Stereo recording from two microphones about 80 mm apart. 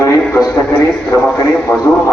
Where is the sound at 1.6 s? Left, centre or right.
Centre.